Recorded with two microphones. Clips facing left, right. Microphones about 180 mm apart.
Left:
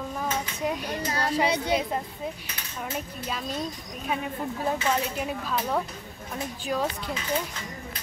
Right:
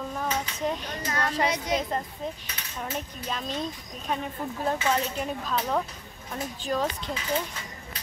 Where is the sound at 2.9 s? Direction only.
5° left (ahead or behind).